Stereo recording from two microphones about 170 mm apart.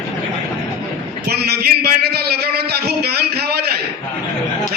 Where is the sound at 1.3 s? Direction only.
70° right (ahead or behind).